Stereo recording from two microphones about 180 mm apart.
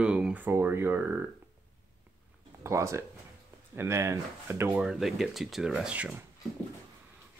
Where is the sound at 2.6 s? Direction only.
15° right (ahead or behind).